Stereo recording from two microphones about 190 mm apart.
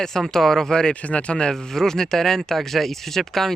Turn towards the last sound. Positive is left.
turn(degrees=0)  # may be behind; listen again after turning